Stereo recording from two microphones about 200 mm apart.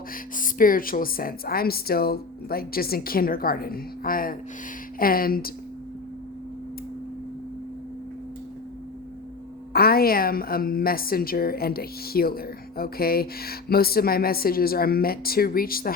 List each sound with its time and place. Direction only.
0.3 s a woman's voice: 45° left (ahead or behind)
9.7 s a woman's voice: 50° left (ahead or behind)